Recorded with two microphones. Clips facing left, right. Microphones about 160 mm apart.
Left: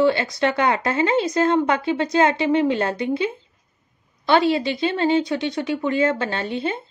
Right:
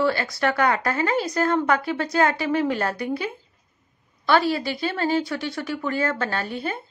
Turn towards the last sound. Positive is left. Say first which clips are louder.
# left 3 dB
turn(degrees=25)  # may be behind; listen again after turning